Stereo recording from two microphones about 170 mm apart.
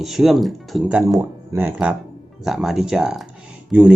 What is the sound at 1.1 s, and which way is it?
Speech, 20° right (ahead or behind).